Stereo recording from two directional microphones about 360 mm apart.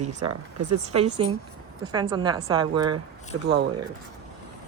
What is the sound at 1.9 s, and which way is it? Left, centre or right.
Speech, centre.